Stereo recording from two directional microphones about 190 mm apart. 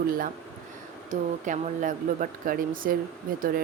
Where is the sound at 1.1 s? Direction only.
40° right (ahead or behind).